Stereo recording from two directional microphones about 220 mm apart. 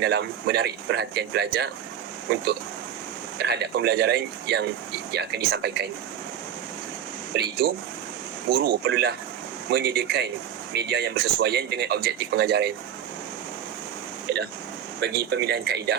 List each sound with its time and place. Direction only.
0.0 s speech: 45° right (ahead or behind)
3.3 s speech: 50° right (ahead or behind)
7.3 s speech: 45° right (ahead or behind)
14.3 s speech: 50° right (ahead or behind)